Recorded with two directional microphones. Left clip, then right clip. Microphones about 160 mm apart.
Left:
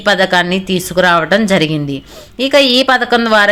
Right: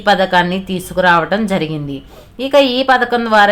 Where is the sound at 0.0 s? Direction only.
20° left (ahead or behind).